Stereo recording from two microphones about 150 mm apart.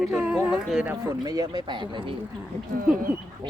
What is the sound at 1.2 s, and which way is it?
Speech, 25° right (ahead or behind).